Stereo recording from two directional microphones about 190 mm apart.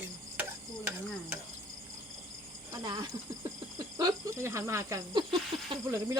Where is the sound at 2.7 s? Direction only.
25° right (ahead or behind).